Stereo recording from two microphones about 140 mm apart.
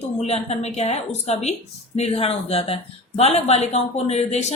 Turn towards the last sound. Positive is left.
turn(degrees=50)  # may be behind; listen again after turning